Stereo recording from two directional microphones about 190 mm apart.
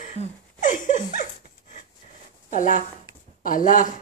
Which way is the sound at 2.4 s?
40° left (ahead or behind).